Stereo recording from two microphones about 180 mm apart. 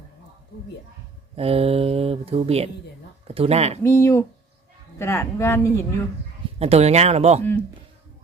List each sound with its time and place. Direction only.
1.4 s speech: 30° right (ahead or behind)
3.8 s speech: 15° left (ahead or behind)
6.6 s speech: 35° right (ahead or behind)